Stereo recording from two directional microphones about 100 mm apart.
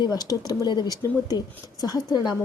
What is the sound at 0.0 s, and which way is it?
Speech, 40° left (ahead or behind).